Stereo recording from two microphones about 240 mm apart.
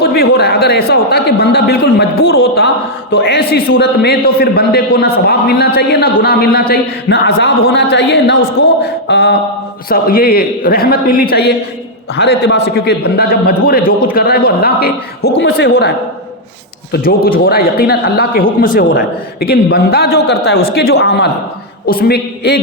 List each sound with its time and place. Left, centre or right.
0.0 s a man's voice: left
8.8 s a sound: left
9.9 s a man's voice: left
16.9 s a man's voice: left